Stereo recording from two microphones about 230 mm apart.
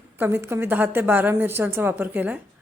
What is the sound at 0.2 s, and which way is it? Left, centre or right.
A woman's voice, centre.